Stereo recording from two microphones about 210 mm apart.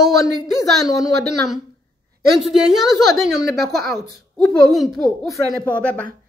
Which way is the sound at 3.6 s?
50° right (ahead or behind).